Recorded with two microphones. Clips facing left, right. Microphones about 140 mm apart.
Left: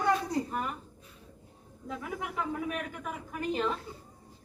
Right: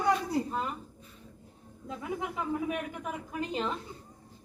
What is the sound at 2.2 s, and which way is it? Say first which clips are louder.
Speech: right 1 dB; 25° right (ahead or behind).